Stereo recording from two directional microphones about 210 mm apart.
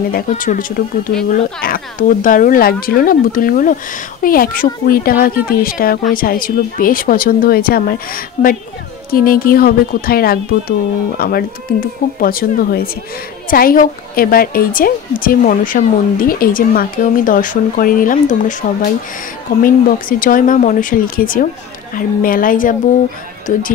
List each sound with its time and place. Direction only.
0.1 s a woman's voice: 40° left (ahead or behind)
19.6 s a woman's voice: 40° left (ahead or behind)